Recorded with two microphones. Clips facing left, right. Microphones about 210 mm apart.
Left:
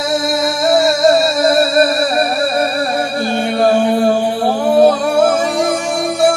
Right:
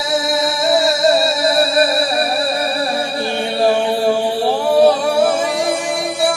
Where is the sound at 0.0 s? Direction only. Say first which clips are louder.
Left 2 dB; 50° left (ahead or behind).